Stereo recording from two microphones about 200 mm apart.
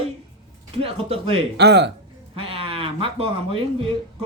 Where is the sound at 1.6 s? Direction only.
55° right (ahead or behind).